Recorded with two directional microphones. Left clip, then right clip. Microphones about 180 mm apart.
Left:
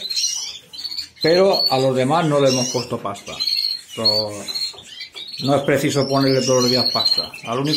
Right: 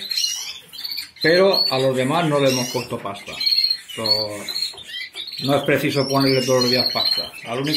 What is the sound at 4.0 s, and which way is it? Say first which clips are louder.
Speech: left 3 dB; centre (ahead or behind).